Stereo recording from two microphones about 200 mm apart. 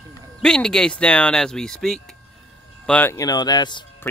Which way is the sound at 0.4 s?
5° left (ahead or behind).